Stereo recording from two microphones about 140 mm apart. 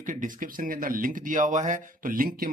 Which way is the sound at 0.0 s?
70° right (ahead or behind).